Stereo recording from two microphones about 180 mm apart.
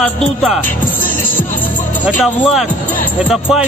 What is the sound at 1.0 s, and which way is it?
Music, 50° left (ahead or behind).